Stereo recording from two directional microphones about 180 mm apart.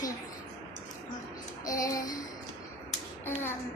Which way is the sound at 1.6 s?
20° left (ahead or behind).